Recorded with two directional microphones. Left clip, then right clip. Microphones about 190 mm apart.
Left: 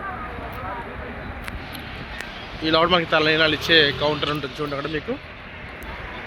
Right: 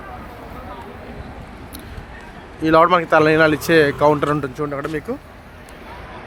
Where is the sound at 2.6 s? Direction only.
70° right (ahead or behind).